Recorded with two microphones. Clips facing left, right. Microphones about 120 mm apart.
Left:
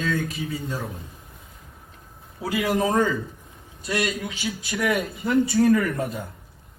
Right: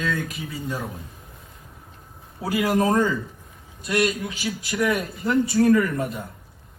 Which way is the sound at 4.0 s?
25° right (ahead or behind).